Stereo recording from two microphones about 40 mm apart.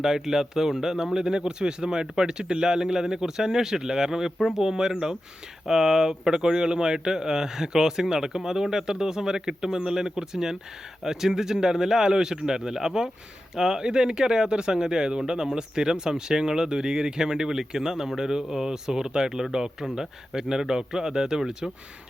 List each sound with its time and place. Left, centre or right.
0.0 s speech: centre